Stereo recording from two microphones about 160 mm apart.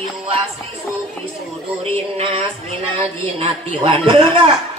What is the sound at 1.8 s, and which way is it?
Speech, 40° right (ahead or behind).